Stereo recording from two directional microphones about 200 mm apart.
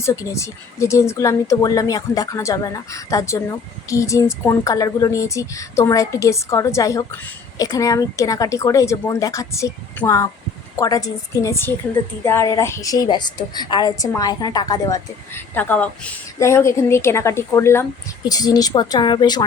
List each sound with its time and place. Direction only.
0.0 s a woman's voice: 15° left (ahead or behind)